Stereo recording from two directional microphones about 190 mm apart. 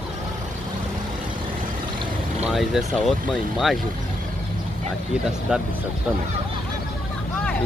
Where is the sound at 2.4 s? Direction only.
5° right (ahead or behind).